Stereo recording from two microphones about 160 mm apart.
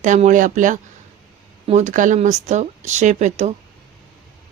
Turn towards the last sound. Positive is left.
turn(degrees=-45)  # may be behind; listen again after turning